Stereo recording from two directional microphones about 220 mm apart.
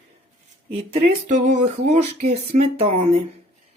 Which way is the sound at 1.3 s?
30° right (ahead or behind).